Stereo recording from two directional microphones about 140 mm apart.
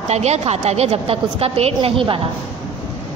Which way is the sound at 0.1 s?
50° right (ahead or behind).